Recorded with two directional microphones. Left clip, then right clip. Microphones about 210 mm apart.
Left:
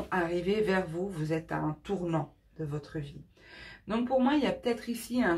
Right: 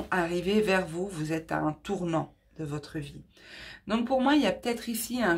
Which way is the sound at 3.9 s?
45° right (ahead or behind).